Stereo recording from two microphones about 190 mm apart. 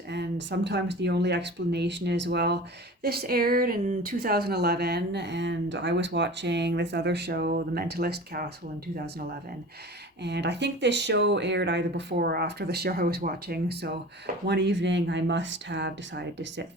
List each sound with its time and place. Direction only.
0.1 s speech: 65° right (ahead or behind)
10.2 s speech: 65° right (ahead or behind)